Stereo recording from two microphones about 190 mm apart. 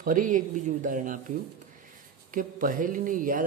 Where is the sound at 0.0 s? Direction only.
45° right (ahead or behind).